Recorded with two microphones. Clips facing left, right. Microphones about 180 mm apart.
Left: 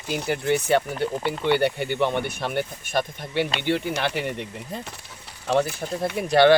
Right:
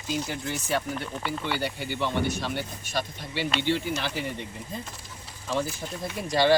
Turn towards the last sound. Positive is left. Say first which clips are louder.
# left 7 dB
turn(degrees=65)  # may be behind; listen again after turning